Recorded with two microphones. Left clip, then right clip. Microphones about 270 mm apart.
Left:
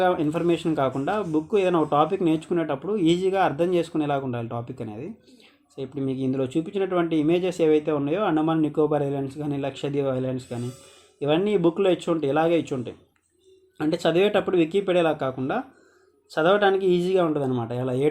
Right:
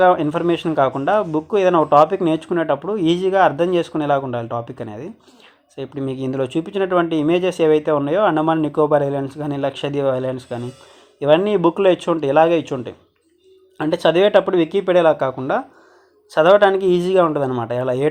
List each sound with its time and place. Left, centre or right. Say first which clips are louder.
0.0 s speech: right 8 dB; centre